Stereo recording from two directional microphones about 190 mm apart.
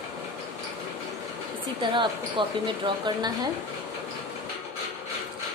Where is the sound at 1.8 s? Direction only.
25° right (ahead or behind).